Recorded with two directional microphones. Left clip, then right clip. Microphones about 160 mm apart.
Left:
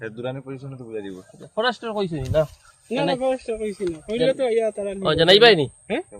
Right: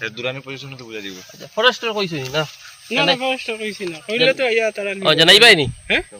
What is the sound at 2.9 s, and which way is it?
Speech, 10° left (ahead or behind).